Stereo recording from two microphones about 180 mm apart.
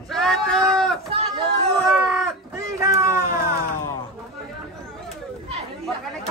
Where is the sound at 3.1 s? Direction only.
55° left (ahead or behind).